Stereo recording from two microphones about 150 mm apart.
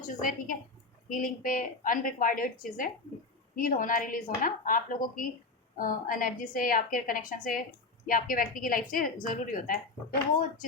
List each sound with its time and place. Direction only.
0.2 s a woman's voice: 65° left (ahead or behind)